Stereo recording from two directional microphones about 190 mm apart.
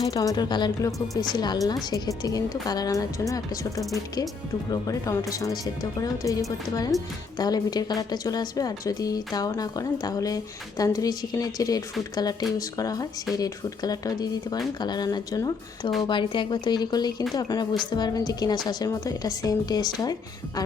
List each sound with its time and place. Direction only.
0.0 s a woman's voice: 20° left (ahead or behind)